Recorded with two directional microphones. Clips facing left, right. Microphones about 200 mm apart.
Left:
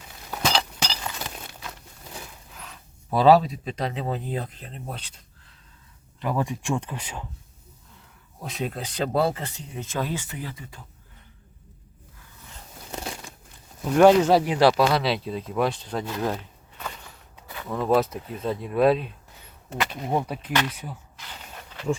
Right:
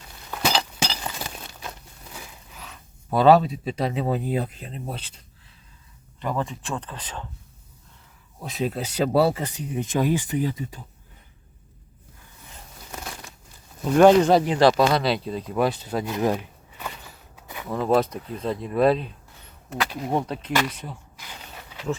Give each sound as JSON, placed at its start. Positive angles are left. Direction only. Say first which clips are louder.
{"t": 0.4, "sound": "chink", "louder": "right 1 dB", "side_deg": -5}
{"t": 2.6, "sound": "speech", "louder": "right 1 dB", "side_deg": 0}
{"t": 6.1, "sound": "speech", "louder": "left 1 dB", "side_deg": 5}
{"t": 8.4, "sound": "speech", "louder": "right 4 dB", "side_deg": 0}
{"t": 13.9, "sound": "speech", "louder": "right 1 dB", "side_deg": 5}
{"t": 16.7, "sound": "walk", "louder": "right 1 dB", "side_deg": -5}
{"t": 17.4, "sound": "a sound", "louder": "right 1 dB", "side_deg": -15}
{"t": 17.7, "sound": "speech", "louder": "right 1 dB", "side_deg": 0}
{"t": 21.7, "sound": "a sound", "louder": "even", "side_deg": -10}